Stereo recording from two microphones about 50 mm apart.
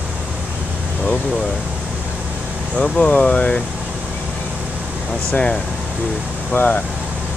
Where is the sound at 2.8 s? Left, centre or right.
Left.